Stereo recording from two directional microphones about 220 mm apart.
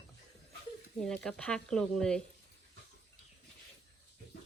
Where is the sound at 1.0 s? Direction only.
Centre (ahead or behind).